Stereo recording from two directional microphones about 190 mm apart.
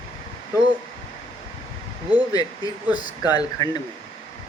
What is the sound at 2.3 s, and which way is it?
Speech, 20° left (ahead or behind).